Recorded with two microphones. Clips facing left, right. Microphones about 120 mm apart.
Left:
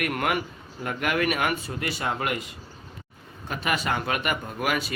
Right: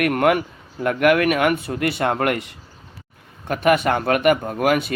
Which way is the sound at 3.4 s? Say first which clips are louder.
Right 10 dB; 55° right (ahead or behind).